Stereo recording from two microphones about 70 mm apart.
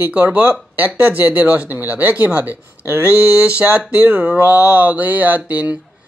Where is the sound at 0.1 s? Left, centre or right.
Right.